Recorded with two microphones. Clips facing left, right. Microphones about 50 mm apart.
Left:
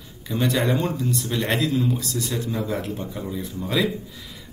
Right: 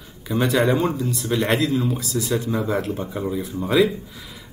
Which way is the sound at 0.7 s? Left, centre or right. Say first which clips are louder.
Right 3 dB; centre.